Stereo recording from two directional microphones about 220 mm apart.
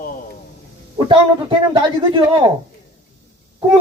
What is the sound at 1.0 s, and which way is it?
A man's voice, 20° right (ahead or behind).